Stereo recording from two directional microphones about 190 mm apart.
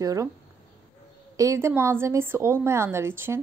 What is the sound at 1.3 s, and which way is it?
A woman's voice, 15° right (ahead or behind).